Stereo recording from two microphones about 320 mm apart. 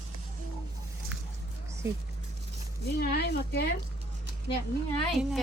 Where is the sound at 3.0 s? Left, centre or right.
Left.